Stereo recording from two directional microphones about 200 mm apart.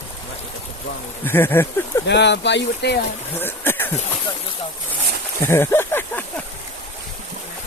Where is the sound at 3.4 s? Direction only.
10° left (ahead or behind).